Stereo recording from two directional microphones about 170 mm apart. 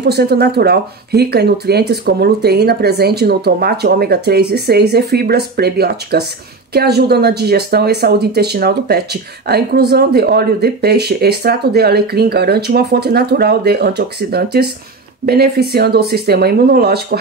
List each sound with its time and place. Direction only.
0.0 s speech: 70° right (ahead or behind)